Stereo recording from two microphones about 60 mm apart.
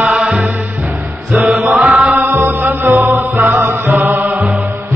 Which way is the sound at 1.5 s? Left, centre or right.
Centre.